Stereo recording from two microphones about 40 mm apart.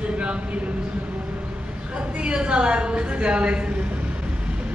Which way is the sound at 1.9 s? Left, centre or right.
Right.